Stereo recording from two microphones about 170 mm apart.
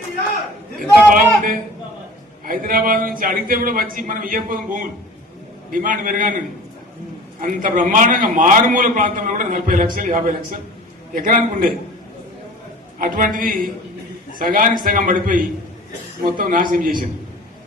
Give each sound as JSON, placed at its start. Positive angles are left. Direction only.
{"t": 0.8, "sound": "a man's voice", "side_deg": -55}
{"t": 7.4, "sound": "a man's voice", "side_deg": -50}
{"t": 13.0, "sound": "a man's voice", "side_deg": -55}
{"t": 16.4, "sound": "a man's voice", "side_deg": -55}